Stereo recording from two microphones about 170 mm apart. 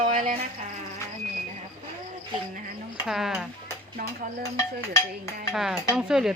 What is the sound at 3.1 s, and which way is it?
Speech, centre (ahead or behind).